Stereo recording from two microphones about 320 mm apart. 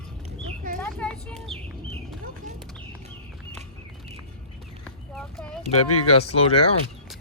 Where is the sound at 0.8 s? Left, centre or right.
Centre.